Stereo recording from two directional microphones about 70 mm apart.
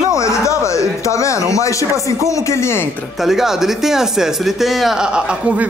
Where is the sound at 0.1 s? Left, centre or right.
Left.